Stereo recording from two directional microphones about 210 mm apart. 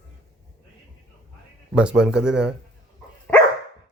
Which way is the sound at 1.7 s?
5° right (ahead or behind).